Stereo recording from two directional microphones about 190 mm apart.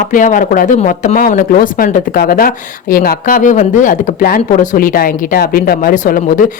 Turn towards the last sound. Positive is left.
turn(degrees=45)  # may be behind; listen again after turning